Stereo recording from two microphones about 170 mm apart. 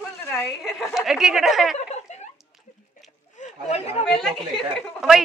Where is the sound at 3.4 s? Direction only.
40° left (ahead or behind).